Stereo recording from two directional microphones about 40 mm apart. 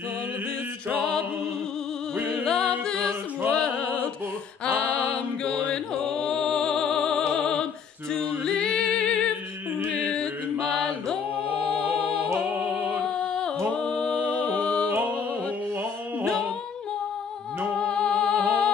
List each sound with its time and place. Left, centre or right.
2.2 s music: centre; by 5.2 s left
5.6 s music: left
8.1 s a capella: centre
9.8 s music: left
13.3 s a capella: left
14.1 s music: left
17.7 s music: left